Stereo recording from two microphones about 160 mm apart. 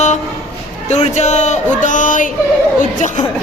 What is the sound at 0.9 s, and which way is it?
Speech, 45° left (ahead or behind).